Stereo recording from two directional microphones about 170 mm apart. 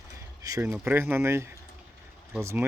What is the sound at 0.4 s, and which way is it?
Speech, 15° right (ahead or behind).